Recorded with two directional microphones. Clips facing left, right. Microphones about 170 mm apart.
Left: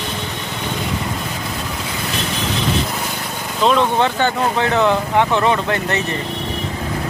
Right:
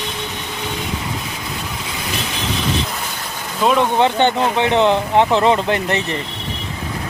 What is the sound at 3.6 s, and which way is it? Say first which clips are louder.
Speech: even; 10° right (ahead or behind).